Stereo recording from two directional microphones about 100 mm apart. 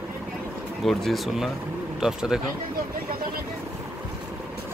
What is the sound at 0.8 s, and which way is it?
Speech, centre (ahead or behind).